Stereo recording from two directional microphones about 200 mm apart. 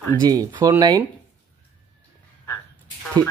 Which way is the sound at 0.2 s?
20° right (ahead or behind).